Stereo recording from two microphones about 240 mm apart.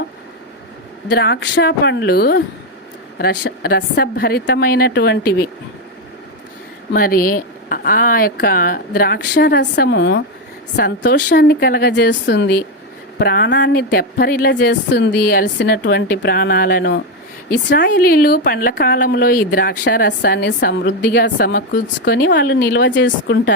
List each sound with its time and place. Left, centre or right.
1.0 s a woman's voice: left
6.9 s a woman's voice: left